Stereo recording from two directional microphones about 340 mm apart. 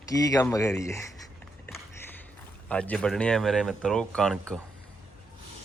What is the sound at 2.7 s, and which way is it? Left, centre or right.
Speech, centre.